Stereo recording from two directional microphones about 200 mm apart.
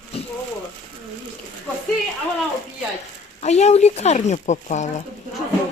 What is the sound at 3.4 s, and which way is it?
Speech, 35° left (ahead or behind).